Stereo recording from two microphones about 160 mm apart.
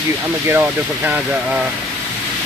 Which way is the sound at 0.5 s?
10° right (ahead or behind).